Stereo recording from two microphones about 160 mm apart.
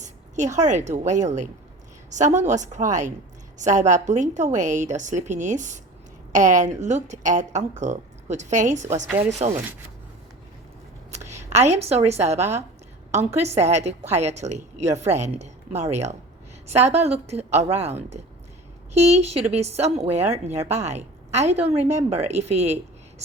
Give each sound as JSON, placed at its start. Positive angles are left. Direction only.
{"t": 0.0, "sound": "a woman's voice", "side_deg": -50}
{"t": 9.0, "sound": "speech", "side_deg": -10}
{"t": 11.5, "sound": "a woman's voice", "side_deg": -45}
{"t": 18.9, "sound": "a woman's voice", "side_deg": -45}